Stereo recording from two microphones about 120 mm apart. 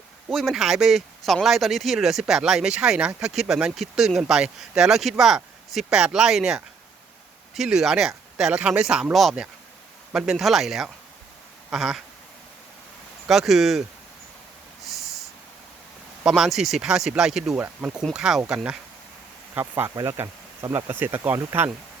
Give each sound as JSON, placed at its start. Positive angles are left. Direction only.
{"t": 0.3, "sound": "speech", "side_deg": 0}
{"t": 13.2, "sound": "speech", "side_deg": 0}
{"t": 16.2, "sound": "speech", "side_deg": -5}
{"t": 19.5, "sound": "speech", "side_deg": -20}